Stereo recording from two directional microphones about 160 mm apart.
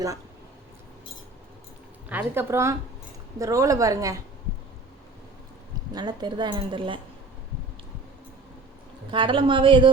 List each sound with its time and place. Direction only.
2.0 s a woman's voice: 10° right (ahead or behind)
5.9 s a woman's voice: 25° right (ahead or behind)
9.0 s a woman's voice: 30° right (ahead or behind)